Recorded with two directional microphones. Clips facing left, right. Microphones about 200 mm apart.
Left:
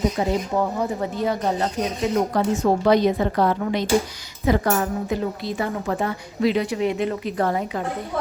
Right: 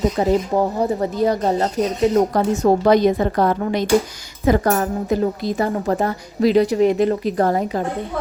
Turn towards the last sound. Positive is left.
turn(degrees=-40)  # may be behind; listen again after turning